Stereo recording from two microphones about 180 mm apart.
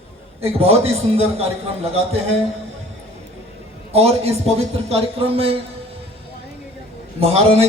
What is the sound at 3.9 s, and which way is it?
A man's voice, 35° right (ahead or behind).